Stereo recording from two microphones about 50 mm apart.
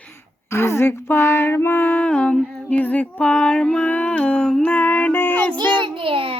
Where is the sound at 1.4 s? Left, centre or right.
Left.